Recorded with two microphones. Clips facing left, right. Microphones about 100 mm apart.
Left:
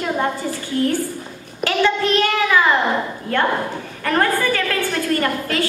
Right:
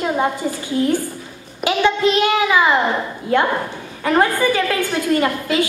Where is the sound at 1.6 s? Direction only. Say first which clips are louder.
Right 1 dB; 15° right (ahead or behind).